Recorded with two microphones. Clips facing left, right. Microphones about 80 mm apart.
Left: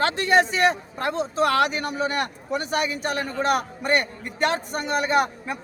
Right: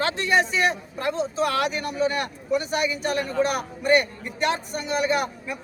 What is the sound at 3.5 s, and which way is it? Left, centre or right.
A man's voice, left.